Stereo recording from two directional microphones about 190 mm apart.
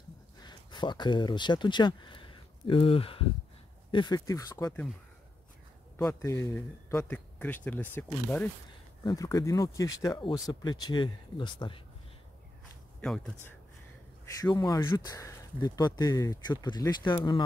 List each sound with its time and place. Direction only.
0.4 s speech: 20° left (ahead or behind)
5.9 s speech: 15° left (ahead or behind)
13.0 s speech: 5° left (ahead or behind)
14.2 s speech: 20° left (ahead or behind)